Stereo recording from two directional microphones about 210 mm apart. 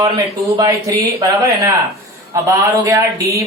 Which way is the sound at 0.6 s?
15° right (ahead or behind).